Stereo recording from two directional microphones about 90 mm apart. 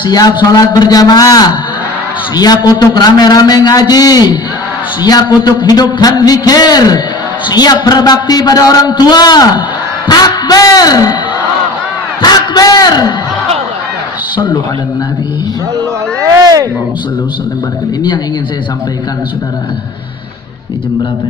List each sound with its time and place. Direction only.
0.0 s a man's voice: 50° left (ahead or behind)
12.2 s speech: 45° left (ahead or behind)
14.3 s speech: 60° left (ahead or behind)
16.2 s speech: 40° right (ahead or behind)